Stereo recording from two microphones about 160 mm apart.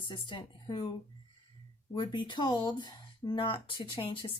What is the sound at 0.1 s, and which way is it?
Speech, 30° left (ahead or behind).